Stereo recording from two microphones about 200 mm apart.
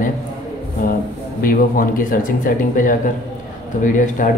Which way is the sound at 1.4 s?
45° left (ahead or behind).